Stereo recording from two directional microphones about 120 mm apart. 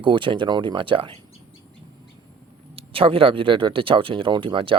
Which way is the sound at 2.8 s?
50° right (ahead or behind).